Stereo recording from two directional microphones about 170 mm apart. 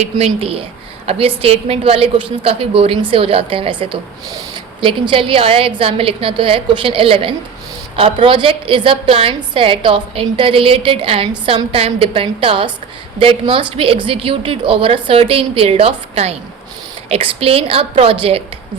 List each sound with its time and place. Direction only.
0.3 s a woman's voice: 35° right (ahead or behind)